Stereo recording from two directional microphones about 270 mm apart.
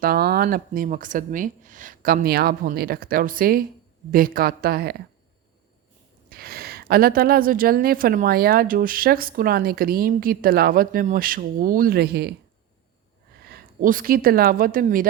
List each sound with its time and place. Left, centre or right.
0.0 s a woman's voice: right
6.3 s a woman's voice: right
13.4 s speech: right